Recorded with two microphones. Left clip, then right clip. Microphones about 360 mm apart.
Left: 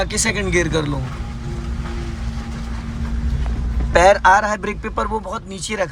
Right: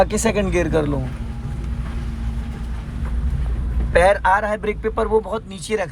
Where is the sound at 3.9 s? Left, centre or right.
Centre.